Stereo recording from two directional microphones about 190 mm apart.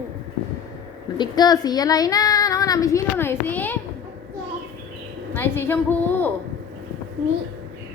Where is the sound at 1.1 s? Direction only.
20° left (ahead or behind).